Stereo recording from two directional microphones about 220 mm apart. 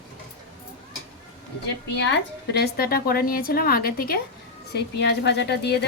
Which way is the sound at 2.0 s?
50° left (ahead or behind).